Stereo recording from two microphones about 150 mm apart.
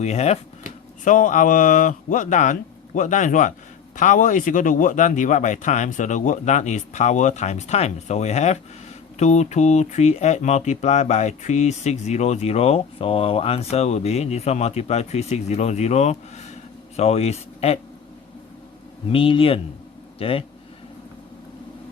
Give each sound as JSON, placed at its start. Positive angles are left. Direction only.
{"t": 0.0, "sound": "speech", "side_deg": 45}
{"t": 19.1, "sound": "speech", "side_deg": 35}